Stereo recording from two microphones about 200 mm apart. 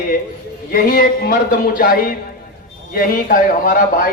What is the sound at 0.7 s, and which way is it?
A man's voice, 45° left (ahead or behind).